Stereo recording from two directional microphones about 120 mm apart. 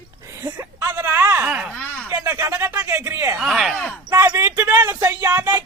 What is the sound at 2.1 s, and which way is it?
Speech, 15° right (ahead or behind).